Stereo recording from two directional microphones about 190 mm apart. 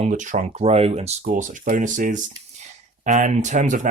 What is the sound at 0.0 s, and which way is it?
Speech, 40° right (ahead or behind).